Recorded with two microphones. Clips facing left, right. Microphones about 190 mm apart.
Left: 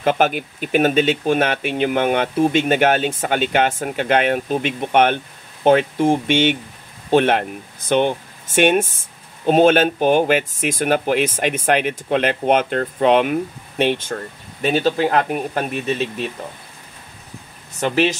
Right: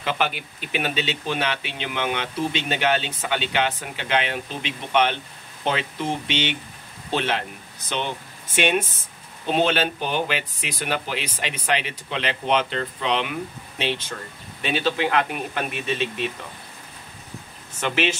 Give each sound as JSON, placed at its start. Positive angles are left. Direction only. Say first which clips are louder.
{"t": 0.0, "sound": "speech", "louder": "left 8 dB", "side_deg": 45}
{"t": 17.7, "sound": "speech", "louder": "left 6 dB", "side_deg": 40}